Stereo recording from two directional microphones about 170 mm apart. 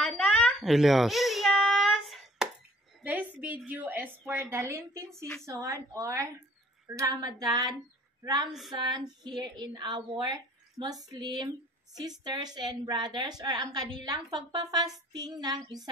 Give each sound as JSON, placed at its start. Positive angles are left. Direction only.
{"t": 0.0, "sound": "a sound", "side_deg": 5}
{"t": 5.1, "sound": "a woman's voice", "side_deg": 5}
{"t": 5.4, "sound": "a woman's voice", "side_deg": -20}
{"t": 8.5, "sound": "a woman's voice", "side_deg": 0}
{"t": 8.8, "sound": "a woman's voice", "side_deg": -25}